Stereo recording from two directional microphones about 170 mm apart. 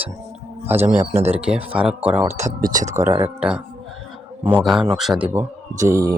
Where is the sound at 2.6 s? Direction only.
50° right (ahead or behind).